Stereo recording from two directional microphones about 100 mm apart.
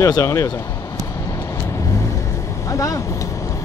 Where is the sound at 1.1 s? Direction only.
30° left (ahead or behind).